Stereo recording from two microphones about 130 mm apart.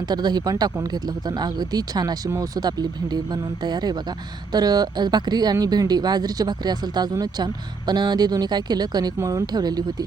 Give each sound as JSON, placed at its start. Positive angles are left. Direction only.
{"t": 0.1, "sound": "speech", "side_deg": -30}